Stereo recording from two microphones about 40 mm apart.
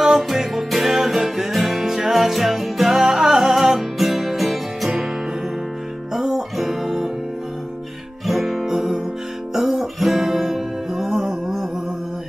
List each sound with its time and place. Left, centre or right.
0.0 s music: centre
6.1 s music: centre
6.5 s music: centre
8.3 s music: centre